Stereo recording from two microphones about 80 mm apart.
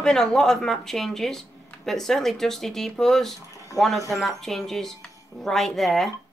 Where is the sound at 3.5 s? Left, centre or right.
Left.